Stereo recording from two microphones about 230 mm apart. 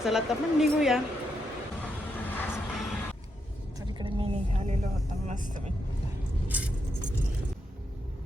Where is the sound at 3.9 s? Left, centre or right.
Centre.